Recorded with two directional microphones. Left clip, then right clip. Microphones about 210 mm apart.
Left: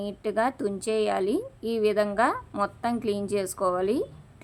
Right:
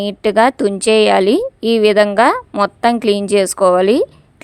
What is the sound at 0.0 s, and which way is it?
A woman's voice, 45° right (ahead or behind).